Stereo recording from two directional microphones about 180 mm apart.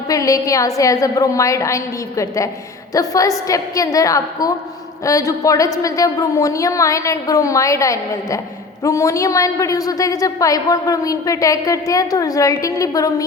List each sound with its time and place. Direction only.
0.1 s a woman's voice: 20° left (ahead or behind)